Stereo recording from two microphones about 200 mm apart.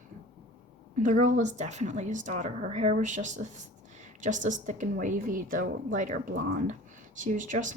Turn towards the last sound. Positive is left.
turn(degrees=-40)  # may be behind; listen again after turning